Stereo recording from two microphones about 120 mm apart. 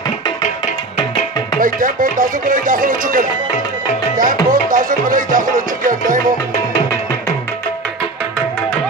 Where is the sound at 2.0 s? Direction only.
90° right.